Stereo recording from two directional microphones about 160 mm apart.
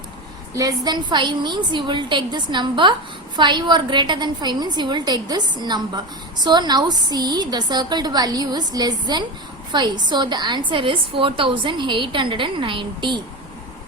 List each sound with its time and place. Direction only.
0.5 s a woman's voice: 25° right (ahead or behind)